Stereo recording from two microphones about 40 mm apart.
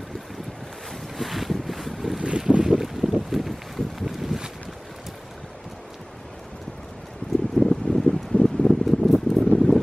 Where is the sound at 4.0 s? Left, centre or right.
Centre.